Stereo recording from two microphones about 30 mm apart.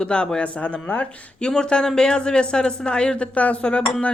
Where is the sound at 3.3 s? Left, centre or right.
Left.